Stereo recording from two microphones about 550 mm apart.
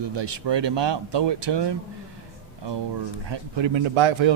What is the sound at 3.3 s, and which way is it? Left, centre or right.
A man's voice, right.